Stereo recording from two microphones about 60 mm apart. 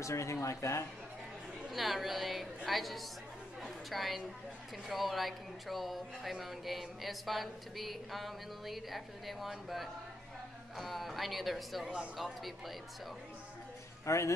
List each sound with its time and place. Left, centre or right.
0.0 s speech: left
1.7 s speech: centre
14.0 s speech: left